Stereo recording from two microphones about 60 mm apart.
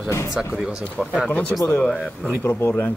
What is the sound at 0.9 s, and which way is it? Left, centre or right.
Speech, centre.